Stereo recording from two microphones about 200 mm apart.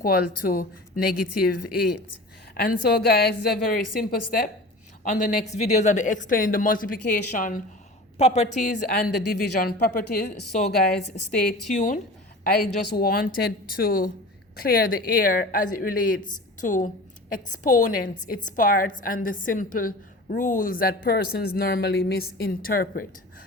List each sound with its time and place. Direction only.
0.0 s speech: 45° left (ahead or behind)
11.7 s speech: 40° left (ahead or behind)
12.5 s speech: 50° left (ahead or behind)